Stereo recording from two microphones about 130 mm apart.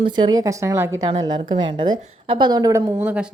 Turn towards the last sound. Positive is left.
turn(degrees=-10)  # may be behind; listen again after turning